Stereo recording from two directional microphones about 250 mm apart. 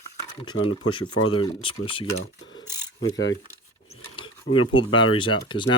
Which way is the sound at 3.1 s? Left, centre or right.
Left.